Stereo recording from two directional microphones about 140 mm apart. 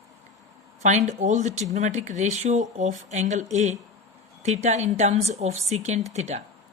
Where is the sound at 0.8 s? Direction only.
60° right (ahead or behind).